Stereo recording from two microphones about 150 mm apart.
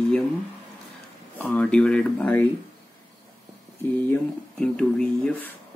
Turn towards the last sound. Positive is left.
turn(degrees=5)  # may be behind; listen again after turning